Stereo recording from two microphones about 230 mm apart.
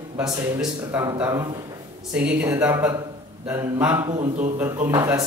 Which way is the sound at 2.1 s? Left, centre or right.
Centre.